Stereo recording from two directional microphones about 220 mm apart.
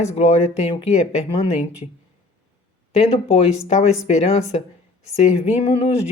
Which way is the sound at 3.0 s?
30° left (ahead or behind).